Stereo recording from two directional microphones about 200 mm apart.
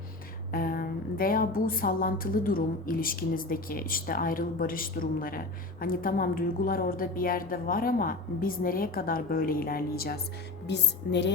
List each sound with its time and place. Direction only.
0.5 s a woman's voice: 45° left (ahead or behind)
10.7 s speech: 60° left (ahead or behind)